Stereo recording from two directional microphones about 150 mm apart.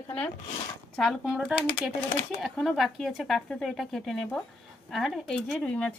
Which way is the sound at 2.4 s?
Centre (ahead or behind).